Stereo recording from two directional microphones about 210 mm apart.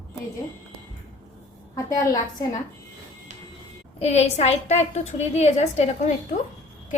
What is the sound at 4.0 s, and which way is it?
A woman's voice, 30° left (ahead or behind).